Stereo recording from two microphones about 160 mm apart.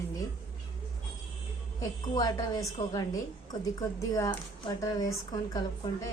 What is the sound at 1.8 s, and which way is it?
Speech, 25° left (ahead or behind).